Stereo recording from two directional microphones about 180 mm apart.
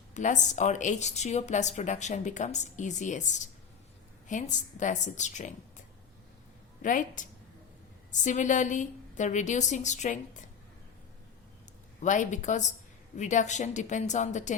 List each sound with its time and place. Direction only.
0.1 s a woman's voice: 45° left (ahead or behind)
6.8 s a woman's voice: 45° left (ahead or behind)
12.0 s a woman's voice: 45° left (ahead or behind)